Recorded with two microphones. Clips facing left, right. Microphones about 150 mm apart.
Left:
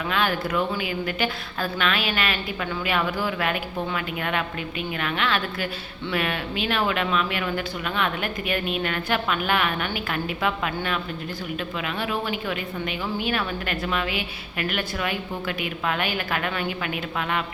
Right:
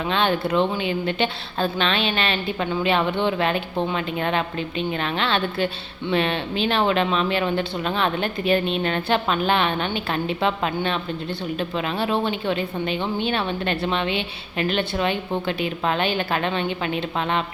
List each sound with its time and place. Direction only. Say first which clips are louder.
0.0 s a woman's voice: right 3 dB; 30° right (ahead or behind)